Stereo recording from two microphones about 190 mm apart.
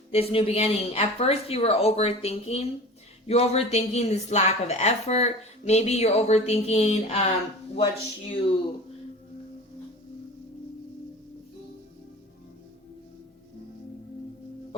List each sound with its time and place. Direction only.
0.1 s speech: 30° left (ahead or behind)